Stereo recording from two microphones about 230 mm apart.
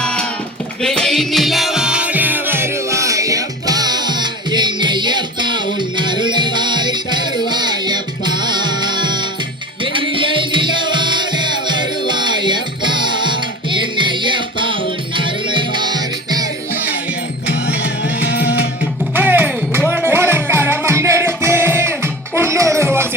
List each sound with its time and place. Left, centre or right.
0.0 s a sound: centre
0.8 s music: centre; by 15.3 s right
17.5 s music: left
19.1 s music: centre